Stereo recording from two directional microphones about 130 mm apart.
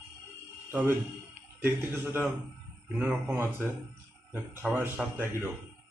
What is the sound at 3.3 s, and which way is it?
Speech, 20° right (ahead or behind).